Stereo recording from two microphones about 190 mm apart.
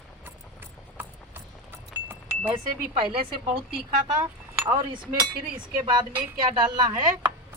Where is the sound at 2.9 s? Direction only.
25° right (ahead or behind).